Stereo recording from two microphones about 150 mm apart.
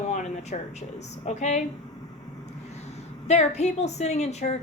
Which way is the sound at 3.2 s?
50° left (ahead or behind).